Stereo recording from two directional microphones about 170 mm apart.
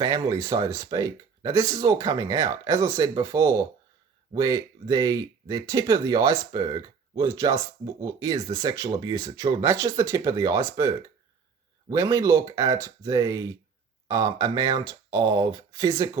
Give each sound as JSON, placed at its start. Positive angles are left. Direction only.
{"t": 0.0, "sound": "speech", "side_deg": -20}